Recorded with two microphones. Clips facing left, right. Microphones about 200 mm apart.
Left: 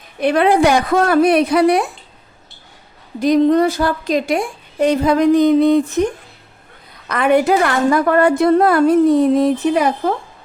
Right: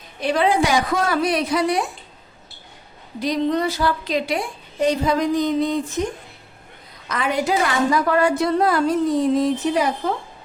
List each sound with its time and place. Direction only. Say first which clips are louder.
0.2 s a woman's voice: left 6 dB; 60° left (ahead or behind)
3.2 s a woman's voice: left 8 dB; 50° left (ahead or behind)
7.1 s a woman's voice: left 8 dB; 60° left (ahead or behind)